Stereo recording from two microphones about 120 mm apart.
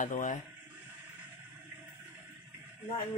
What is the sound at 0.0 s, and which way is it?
Speech, 90° left.